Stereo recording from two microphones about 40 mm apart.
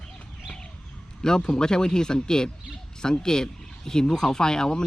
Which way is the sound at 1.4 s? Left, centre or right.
Centre.